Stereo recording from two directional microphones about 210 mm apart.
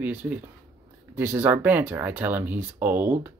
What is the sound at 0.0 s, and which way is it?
Speech, 5° right (ahead or behind).